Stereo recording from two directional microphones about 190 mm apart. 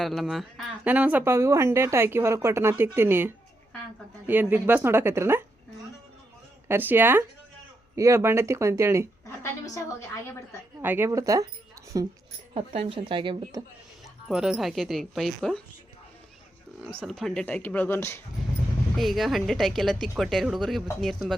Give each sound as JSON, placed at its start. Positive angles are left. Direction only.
{"t": 0.0, "sound": "speech", "side_deg": 0}
{"t": 6.7, "sound": "speech", "side_deg": -10}
{"t": 9.4, "sound": "a sound", "side_deg": 15}
{"t": 10.8, "sound": "speech", "side_deg": -10}
{"t": 12.5, "sound": "a woman's voice", "side_deg": -30}
{"t": 14.3, "sound": "a woman's voice", "side_deg": -5}
{"t": 17.1, "sound": "speech", "side_deg": 0}
{"t": 18.9, "sound": "a woman's voice", "side_deg": 0}